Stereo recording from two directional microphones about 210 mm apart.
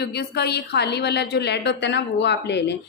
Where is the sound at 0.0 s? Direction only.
50° left (ahead or behind).